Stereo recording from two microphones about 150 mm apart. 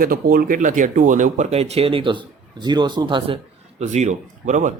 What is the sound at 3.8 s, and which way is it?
Speech, 50° right (ahead or behind).